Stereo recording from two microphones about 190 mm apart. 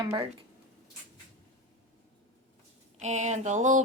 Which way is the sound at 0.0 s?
25° right (ahead or behind).